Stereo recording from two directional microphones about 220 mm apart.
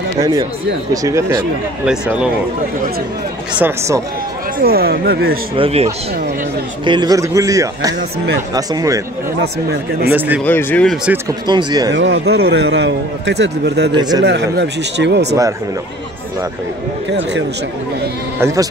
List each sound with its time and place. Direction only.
1.0 s speech: 15° right (ahead or behind)
1.9 s speech: 5° right (ahead or behind)
3.5 s speech: 10° right (ahead or behind)
4.6 s a man's voice: 45° right (ahead or behind)
5.6 s speech: 30° right (ahead or behind)
9.4 s a man's voice: 50° right (ahead or behind)
10.1 s speech: 10° right (ahead or behind)
10.4 s speech: 10° left (ahead or behind)
11.1 s speech: 15° right (ahead or behind)
11.9 s a man's voice: 55° right (ahead or behind)
13.9 s speech: 20° right (ahead or behind)
14.2 s a man's voice: 50° right (ahead or behind)
17.1 s a man's voice: 50° right (ahead or behind)
18.4 s speech: 15° right (ahead or behind)